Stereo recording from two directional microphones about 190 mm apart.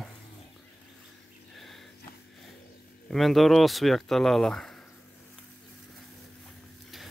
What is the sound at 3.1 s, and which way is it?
Speech, centre (ahead or behind).